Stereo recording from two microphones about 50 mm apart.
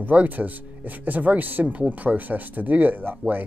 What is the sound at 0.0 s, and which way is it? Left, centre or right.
Speech, right.